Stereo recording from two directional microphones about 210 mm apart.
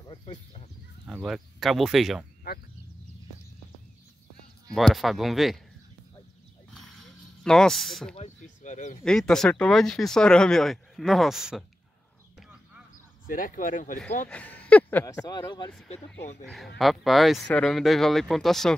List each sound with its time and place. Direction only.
0.1 s speech: 25° left (ahead or behind)
1.0 s speech: 5° right (ahead or behind)
4.6 s speech: centre (ahead or behind)
7.4 s speech: centre (ahead or behind)
8.2 s speech: 35° left (ahead or behind)
9.0 s speech: 5° left (ahead or behind)
12.4 s a sound: 5° right (ahead or behind)
13.3 s speech: 40° left (ahead or behind)
14.3 s speech: 5° left (ahead or behind)
16.4 s speech: centre (ahead or behind)